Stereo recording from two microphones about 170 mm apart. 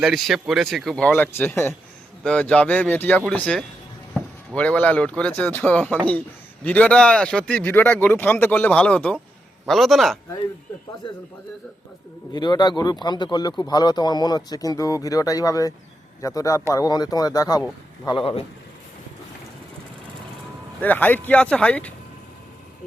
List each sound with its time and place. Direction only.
0.0 s speech: centre (ahead or behind)
12.3 s speech: 25° left (ahead or behind)
20.8 s speech: 10° left (ahead or behind)